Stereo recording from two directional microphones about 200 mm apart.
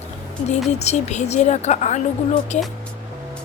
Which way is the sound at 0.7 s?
35° left (ahead or behind).